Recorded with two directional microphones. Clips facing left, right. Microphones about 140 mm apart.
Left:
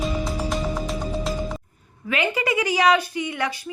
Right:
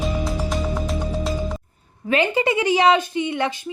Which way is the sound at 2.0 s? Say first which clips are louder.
Right 4 dB; 30° right (ahead or behind).